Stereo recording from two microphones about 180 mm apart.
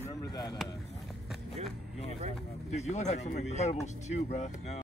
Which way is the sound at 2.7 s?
40° left (ahead or behind).